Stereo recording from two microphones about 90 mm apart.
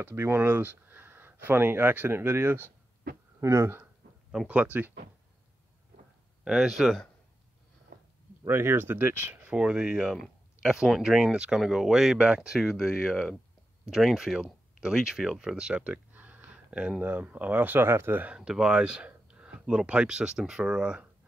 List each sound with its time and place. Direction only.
0.0 s speech: 25° right (ahead or behind)
4.5 s speech: 15° right (ahead or behind)
6.4 s speech: 5° right (ahead or behind)
8.5 s speech: 25° right (ahead or behind)
18.4 s speech: 10° right (ahead or behind)